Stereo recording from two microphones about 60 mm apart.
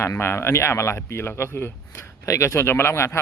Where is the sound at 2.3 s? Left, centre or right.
Left.